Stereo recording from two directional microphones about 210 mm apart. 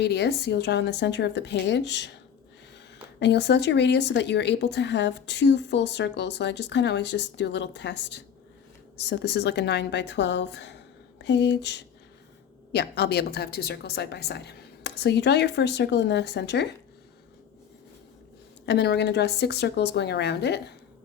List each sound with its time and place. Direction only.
0.0 s a woman's voice: 50° left (ahead or behind)
3.2 s a woman's voice: 55° left (ahead or behind)
18.6 s a woman's voice: 55° left (ahead or behind)